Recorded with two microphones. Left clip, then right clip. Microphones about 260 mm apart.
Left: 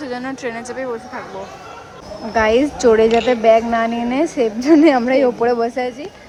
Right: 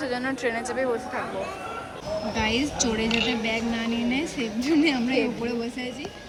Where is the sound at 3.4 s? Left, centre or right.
Left.